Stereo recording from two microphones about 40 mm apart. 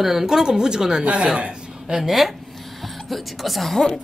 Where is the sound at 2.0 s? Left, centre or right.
Centre.